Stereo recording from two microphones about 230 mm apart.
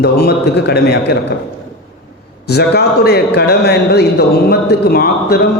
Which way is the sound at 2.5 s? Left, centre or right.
Left.